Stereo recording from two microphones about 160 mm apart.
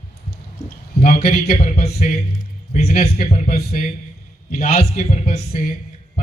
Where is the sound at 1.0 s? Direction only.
55° left (ahead or behind).